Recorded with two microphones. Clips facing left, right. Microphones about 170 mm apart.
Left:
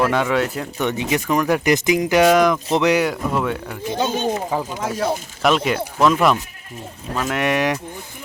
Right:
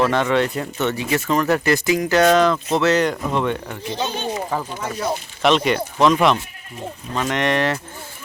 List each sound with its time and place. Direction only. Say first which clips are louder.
0.0 s speech: right 1 dB; 5° left (ahead or behind)
0.8 s speech: left 1 dB; 15° left (ahead or behind)
3.8 s speech: left 4 dB; 50° left (ahead or behind)
4.5 s speech: left 2 dB; 10° left (ahead or behind)